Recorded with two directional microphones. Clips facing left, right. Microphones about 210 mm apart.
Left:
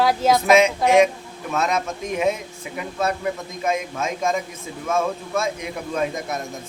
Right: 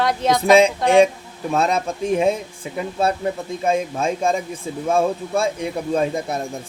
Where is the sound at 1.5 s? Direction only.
30° right (ahead or behind).